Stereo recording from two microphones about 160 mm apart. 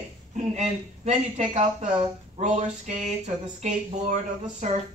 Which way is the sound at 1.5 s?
45° right (ahead or behind).